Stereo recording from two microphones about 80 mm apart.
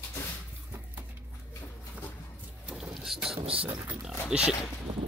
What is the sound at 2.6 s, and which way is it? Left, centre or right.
Vehicle, centre.